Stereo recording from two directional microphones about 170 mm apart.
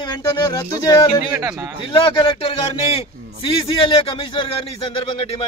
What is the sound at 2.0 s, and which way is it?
Speech, 30° left (ahead or behind).